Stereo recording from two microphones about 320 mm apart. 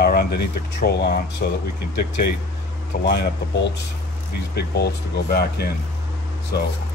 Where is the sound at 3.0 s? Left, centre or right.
Left.